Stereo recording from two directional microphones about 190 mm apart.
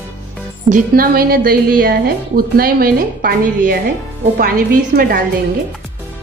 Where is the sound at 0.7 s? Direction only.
45° right (ahead or behind).